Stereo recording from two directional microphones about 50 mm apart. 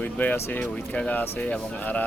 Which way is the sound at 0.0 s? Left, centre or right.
Left.